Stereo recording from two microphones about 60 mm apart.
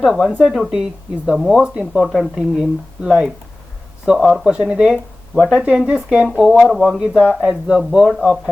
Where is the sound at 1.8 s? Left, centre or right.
Centre.